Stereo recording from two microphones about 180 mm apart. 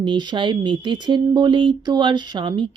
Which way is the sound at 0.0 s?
25° right (ahead or behind).